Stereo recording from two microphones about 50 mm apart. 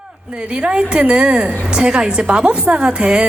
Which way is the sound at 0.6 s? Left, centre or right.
Centre.